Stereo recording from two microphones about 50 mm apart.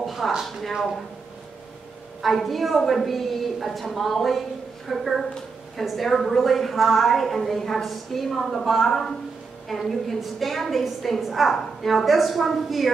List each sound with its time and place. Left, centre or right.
0.0 s a sound: centre
0.5 s a woman's voice: centre
2.2 s a woman's voice: centre